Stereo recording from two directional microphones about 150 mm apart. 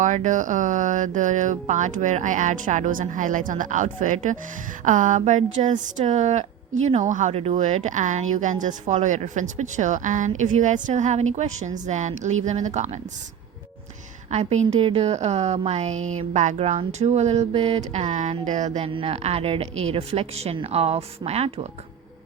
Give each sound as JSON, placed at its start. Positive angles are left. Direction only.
{"t": 0.0, "sound": "a woman's voice", "side_deg": -55}
{"t": 14.3, "sound": "a woman's voice", "side_deg": -45}
{"t": 14.8, "sound": "speech", "side_deg": -35}
{"t": 15.0, "sound": "a woman's voice", "side_deg": -50}
{"t": 18.9, "sound": "a woman's voice", "side_deg": -40}